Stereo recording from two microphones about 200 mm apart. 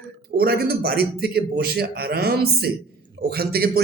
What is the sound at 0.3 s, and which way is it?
Speech, 50° right (ahead or behind).